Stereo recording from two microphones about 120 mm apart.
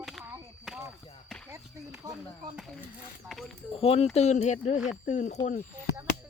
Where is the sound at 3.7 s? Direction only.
55° left (ahead or behind).